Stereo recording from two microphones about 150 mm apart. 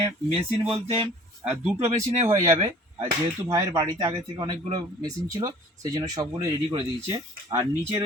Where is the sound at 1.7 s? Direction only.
50° right (ahead or behind).